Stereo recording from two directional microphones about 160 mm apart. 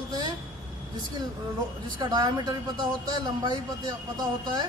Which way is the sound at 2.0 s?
25° right (ahead or behind).